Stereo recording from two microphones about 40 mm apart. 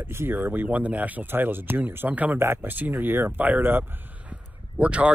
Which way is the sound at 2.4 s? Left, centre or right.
Right.